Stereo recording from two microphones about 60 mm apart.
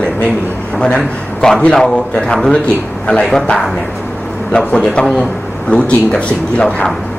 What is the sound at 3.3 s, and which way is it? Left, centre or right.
Speech, centre.